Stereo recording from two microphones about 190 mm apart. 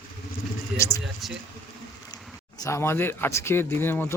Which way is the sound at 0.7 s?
5° right (ahead or behind).